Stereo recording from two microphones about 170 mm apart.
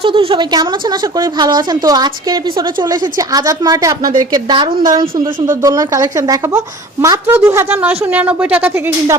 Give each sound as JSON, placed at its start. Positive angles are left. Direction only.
{"t": 0.0, "sound": "a woman's voice", "side_deg": -30}